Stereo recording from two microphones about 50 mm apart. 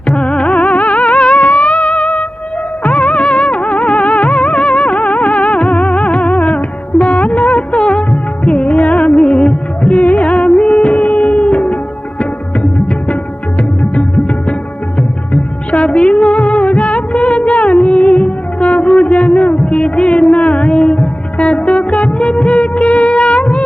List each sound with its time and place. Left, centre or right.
0.2 s music: left